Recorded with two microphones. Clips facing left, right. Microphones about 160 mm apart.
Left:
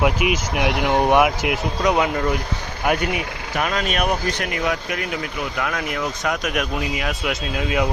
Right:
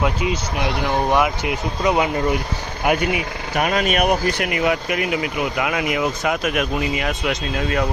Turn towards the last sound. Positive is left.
turn(degrees=5)  # may be behind; listen again after turning